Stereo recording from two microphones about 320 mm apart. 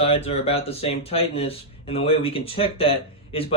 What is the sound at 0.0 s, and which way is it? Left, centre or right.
Speech, centre.